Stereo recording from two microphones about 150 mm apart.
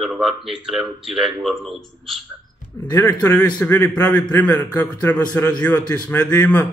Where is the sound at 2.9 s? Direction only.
20° left (ahead or behind).